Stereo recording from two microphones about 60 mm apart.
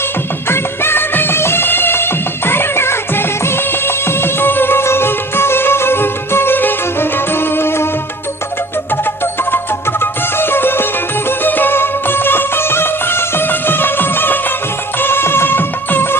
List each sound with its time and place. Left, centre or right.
0.4 s music: left
8.9 s music: left